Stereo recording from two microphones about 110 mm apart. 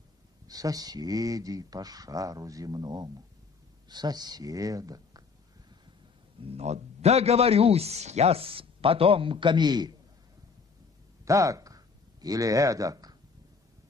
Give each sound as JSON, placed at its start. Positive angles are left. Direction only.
{"t": 0.5, "sound": "speech", "side_deg": -35}
{"t": 6.4, "sound": "a man's voice", "side_deg": -75}
{"t": 11.2, "sound": "speech", "side_deg": -30}